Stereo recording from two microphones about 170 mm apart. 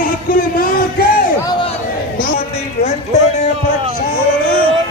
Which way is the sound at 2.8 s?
40° left (ahead or behind).